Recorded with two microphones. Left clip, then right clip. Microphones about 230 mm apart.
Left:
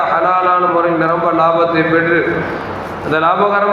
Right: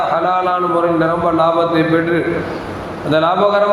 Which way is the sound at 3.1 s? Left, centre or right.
Right.